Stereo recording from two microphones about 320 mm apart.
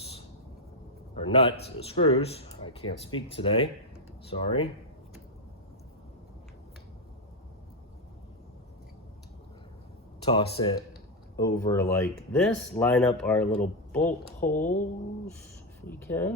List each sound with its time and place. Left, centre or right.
1.1 s speech: centre
10.2 s speech: centre
14.5 s speech: left
15.9 s speech: centre